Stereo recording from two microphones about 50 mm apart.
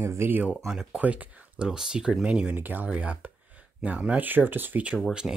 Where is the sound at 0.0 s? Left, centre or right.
Right.